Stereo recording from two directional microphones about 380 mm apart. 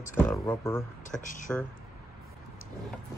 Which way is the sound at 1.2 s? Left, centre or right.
Centre.